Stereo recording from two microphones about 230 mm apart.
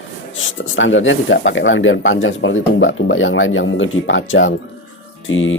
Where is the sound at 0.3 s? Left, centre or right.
Left.